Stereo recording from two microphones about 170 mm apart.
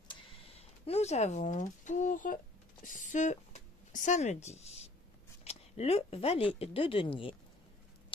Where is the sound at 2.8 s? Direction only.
45° left (ahead or behind).